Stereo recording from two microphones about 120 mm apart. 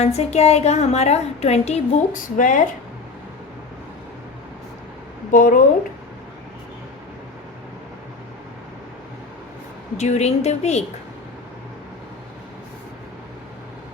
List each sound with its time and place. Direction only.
0.0 s a woman's voice: 65° left (ahead or behind); by 2.6 s 90° left
5.3 s speech: 90° left
10.0 s a woman's voice: 70° left (ahead or behind)